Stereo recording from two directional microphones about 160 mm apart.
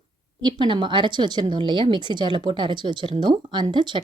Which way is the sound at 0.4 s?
30° right (ahead or behind).